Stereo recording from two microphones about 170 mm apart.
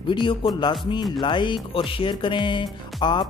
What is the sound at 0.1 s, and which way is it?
Speech, 30° left (ahead or behind).